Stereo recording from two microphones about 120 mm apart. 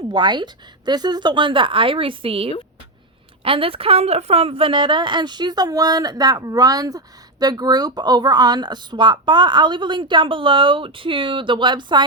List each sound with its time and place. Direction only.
0.1 s a woman's voice: 40° right (ahead or behind)